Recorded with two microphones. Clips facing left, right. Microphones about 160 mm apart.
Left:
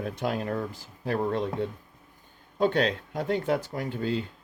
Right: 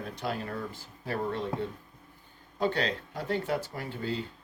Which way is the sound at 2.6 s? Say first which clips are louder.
Left 5 dB; 50° left (ahead or behind).